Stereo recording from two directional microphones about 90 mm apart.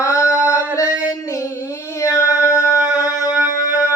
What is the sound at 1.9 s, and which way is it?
Female singing, 35° left (ahead or behind).